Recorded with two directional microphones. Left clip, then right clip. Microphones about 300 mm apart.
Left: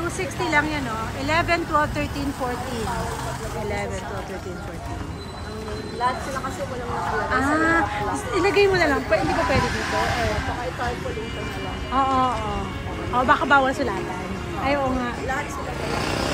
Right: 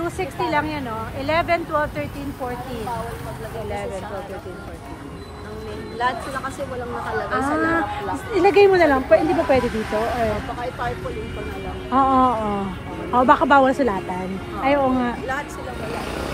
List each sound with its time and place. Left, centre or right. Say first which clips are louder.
0.2 s speech: left 1 dB; centre
6.0 s speech: right 1 dB; right
7.3 s speech: left 1 dB; centre
11.9 s speech: right 4 dB; centre